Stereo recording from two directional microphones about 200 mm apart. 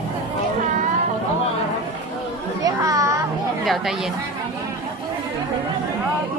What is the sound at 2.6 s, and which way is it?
Children playing, 15° right (ahead or behind).